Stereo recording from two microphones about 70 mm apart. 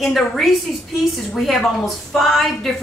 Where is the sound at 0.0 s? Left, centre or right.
Centre.